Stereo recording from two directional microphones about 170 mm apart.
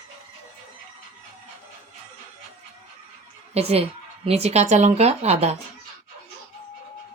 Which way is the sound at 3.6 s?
40° right (ahead or behind).